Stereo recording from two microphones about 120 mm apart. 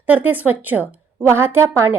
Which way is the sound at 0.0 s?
15° right (ahead or behind).